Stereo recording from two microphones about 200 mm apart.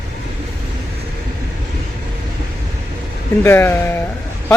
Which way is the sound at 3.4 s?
10° left (ahead or behind).